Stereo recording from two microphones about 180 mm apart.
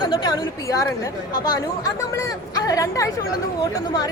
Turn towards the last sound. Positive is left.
turn(degrees=20)  # may be behind; listen again after turning